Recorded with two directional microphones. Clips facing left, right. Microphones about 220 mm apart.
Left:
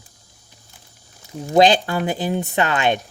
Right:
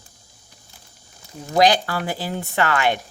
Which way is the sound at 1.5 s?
25° left (ahead or behind).